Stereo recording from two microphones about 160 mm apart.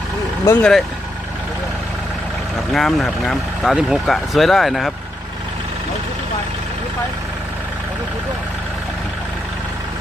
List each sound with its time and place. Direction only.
0.6 s speech: centre (ahead or behind)
2.7 s speech: centre (ahead or behind)